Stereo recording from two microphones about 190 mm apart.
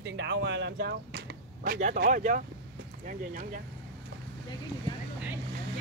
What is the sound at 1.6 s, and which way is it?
Speech, 45° right (ahead or behind).